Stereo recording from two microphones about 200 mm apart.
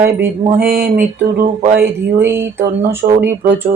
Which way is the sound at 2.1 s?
10° right (ahead or behind).